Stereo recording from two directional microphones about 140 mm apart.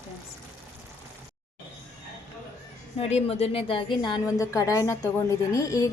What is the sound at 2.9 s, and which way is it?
A woman's voice, 45° left (ahead or behind).